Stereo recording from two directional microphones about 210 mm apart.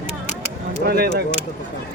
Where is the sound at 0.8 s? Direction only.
50° right (ahead or behind).